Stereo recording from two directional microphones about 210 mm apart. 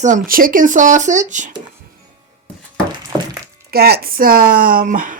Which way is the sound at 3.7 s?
50° right (ahead or behind).